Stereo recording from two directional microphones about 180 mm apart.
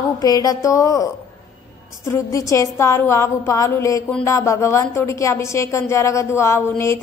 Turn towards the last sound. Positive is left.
turn(degrees=15)  # may be behind; listen again after turning